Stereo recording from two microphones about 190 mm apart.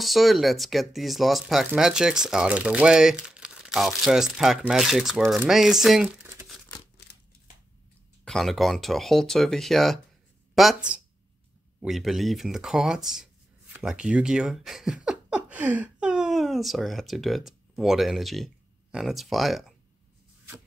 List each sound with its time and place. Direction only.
0.0 s speech: centre (ahead or behind)
8.3 s speech: centre (ahead or behind)